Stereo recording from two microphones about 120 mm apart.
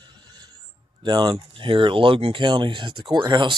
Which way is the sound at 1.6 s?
45° right (ahead or behind).